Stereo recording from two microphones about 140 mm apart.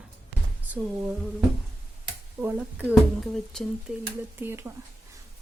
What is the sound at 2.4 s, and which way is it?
Frying, 15° right (ahead or behind).